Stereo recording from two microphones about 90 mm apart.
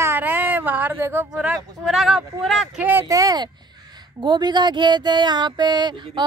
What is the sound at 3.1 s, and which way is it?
Speech, 45° right (ahead or behind).